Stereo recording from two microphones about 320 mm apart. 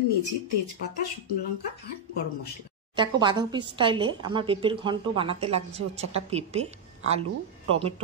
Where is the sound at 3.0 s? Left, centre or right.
Centre.